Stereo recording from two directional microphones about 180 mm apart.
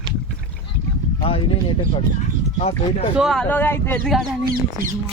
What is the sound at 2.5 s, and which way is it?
Speech, 35° left (ahead or behind).